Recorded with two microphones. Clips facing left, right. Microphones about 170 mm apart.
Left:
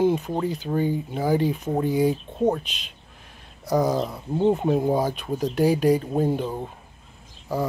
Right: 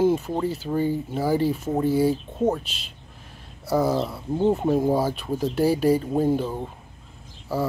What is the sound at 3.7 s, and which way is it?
Speech, 5° right (ahead or behind).